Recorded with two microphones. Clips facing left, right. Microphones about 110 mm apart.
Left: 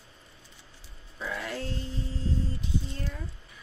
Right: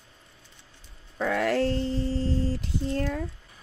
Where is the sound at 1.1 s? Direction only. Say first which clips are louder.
Right 10 dB; 65° right (ahead or behind).